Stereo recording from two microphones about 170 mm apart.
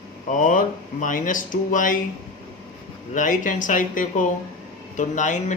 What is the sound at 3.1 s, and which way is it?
Speech, 50° left (ahead or behind).